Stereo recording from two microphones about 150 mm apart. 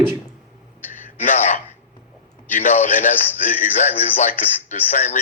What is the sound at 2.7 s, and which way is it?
A man's voice, 50° left (ahead or behind).